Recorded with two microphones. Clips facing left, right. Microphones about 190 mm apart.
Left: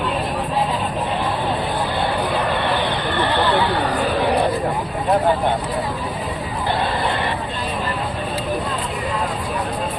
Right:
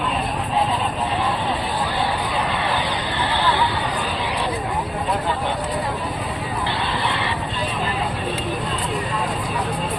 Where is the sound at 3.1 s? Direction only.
60° left (ahead or behind).